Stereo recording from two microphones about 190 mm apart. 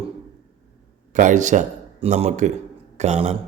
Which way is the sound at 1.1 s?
40° right (ahead or behind).